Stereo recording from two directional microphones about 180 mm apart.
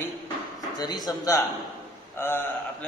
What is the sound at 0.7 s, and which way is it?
A man's voice, 20° left (ahead or behind).